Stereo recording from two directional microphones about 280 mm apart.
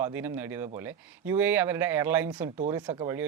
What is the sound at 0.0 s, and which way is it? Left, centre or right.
Speech, centre.